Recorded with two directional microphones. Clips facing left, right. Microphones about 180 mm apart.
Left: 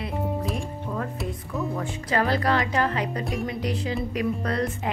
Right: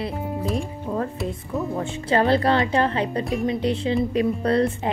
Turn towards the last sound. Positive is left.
turn(degrees=-30)  # may be behind; listen again after turning